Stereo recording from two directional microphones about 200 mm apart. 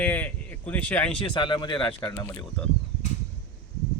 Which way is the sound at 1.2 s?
25° left (ahead or behind).